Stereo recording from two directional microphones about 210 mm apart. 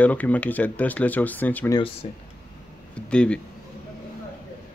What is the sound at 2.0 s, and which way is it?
Speech, 30° left (ahead or behind).